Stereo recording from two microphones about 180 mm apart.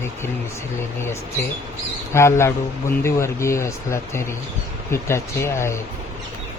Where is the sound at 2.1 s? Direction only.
15° left (ahead or behind).